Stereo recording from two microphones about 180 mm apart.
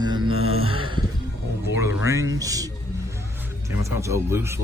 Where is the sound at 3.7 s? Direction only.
15° right (ahead or behind).